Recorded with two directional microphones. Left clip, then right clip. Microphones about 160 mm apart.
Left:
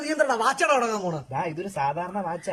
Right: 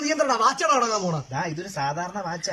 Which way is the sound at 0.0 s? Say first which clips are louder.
Right 1 dB; centre (ahead or behind).